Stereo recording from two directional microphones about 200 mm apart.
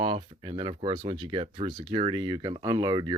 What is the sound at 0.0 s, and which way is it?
Speech, 25° right (ahead or behind).